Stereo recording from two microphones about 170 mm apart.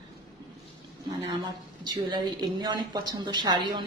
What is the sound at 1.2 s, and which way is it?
A woman's voice, 25° right (ahead or behind).